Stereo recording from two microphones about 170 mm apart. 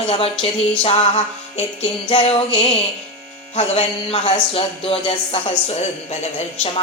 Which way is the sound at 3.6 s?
35° left (ahead or behind).